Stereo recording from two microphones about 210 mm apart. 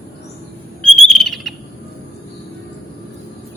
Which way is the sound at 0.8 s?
Centre (ahead or behind).